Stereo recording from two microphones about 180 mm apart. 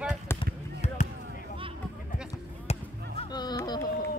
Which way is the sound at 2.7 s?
35° left (ahead or behind).